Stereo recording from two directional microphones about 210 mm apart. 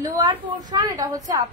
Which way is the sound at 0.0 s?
20° right (ahead or behind).